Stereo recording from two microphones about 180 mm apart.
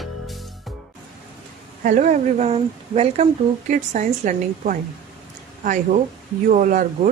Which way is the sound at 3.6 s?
45° right (ahead or behind).